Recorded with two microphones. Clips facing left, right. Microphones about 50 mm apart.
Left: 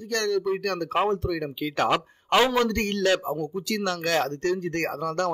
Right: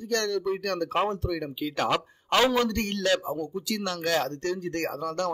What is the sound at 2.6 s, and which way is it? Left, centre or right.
Speech, left.